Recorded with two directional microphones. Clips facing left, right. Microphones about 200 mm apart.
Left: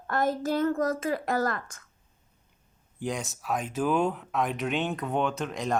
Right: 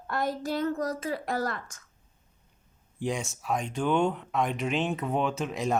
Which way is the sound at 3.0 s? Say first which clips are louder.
Right 1 dB; centre (ahead or behind).